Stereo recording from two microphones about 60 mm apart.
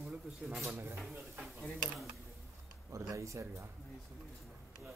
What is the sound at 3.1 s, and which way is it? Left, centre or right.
Speech, right.